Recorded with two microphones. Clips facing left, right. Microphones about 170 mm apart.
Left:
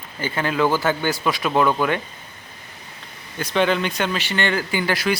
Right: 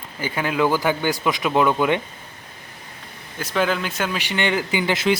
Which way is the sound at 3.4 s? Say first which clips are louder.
Left 2 dB; 5° right (ahead or behind).